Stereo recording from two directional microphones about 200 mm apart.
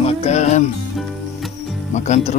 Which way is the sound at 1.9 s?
35° left (ahead or behind).